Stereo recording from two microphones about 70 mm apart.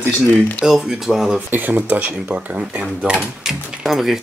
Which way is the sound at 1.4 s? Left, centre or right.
Right.